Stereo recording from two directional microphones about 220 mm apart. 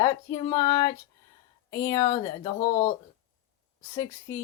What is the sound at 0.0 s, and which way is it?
Speech, 15° left (ahead or behind).